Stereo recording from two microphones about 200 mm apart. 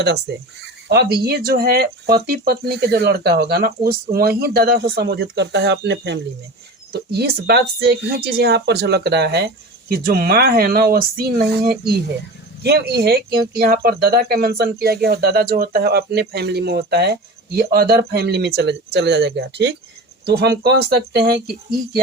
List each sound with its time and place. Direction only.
0.3 s speech: 60° right (ahead or behind)